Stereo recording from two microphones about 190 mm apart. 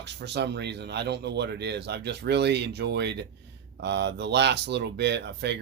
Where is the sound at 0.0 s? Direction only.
65° right (ahead or behind).